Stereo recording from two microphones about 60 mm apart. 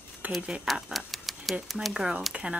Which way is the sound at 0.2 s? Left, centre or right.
Right.